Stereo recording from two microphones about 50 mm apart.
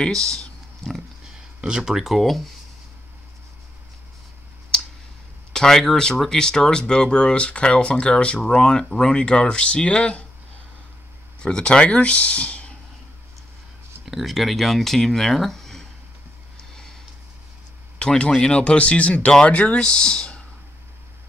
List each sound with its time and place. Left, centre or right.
0.0 s speech: centre
0.8 s pig: centre
1.6 s speech: centre
5.5 s speech: centre
11.4 s speech: centre
14.0 s speech: centre
17.9 s speech: centre